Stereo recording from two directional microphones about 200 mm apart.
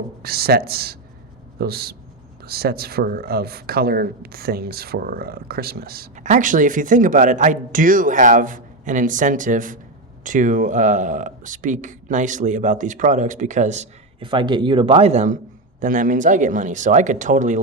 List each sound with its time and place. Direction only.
0.2 s speech: 50° right (ahead or behind)
14.2 s speech: 25° right (ahead or behind)